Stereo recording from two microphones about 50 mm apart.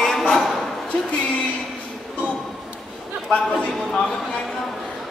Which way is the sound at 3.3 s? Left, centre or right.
Left.